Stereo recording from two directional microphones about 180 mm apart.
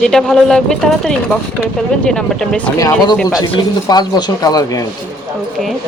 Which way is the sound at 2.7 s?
20° left (ahead or behind).